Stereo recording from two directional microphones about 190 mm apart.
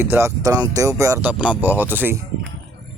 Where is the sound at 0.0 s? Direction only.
10° right (ahead or behind).